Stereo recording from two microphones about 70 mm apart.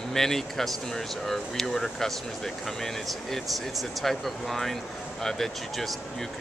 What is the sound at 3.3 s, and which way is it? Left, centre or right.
Speech, centre.